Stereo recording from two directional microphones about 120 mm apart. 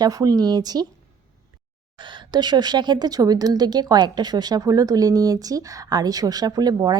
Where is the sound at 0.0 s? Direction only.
30° right (ahead or behind).